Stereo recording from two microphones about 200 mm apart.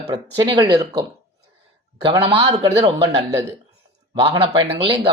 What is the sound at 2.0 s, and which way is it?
Speech, 25° right (ahead or behind).